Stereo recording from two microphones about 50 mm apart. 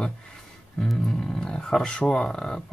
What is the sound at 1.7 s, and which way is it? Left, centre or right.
Speech, centre.